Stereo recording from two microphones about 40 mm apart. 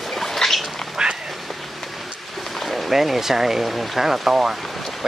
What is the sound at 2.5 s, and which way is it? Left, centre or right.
Speech, centre.